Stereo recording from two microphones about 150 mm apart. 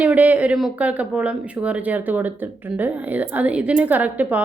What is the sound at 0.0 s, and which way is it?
Speech, 10° right (ahead or behind).